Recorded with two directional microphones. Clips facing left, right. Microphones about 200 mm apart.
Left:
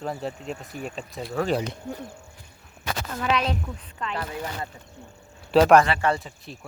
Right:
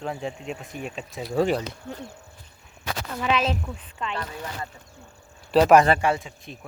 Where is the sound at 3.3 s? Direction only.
5° right (ahead or behind).